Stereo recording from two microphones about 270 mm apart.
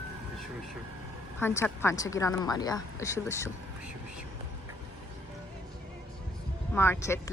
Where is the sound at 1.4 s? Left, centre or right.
Centre.